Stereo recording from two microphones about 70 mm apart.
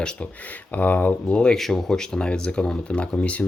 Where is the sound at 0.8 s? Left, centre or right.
Left.